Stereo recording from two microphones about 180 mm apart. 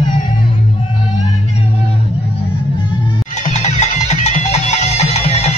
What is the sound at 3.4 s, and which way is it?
Music, 40° left (ahead or behind).